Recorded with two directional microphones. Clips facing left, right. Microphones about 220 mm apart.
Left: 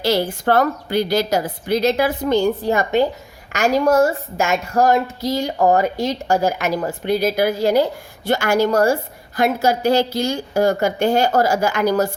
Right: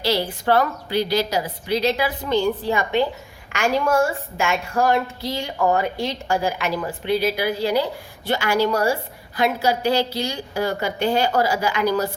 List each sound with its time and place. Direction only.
0.0 s a woman's voice: 45° left (ahead or behind)